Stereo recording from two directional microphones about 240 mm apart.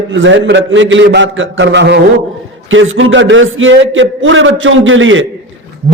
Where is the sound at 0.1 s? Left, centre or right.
Right.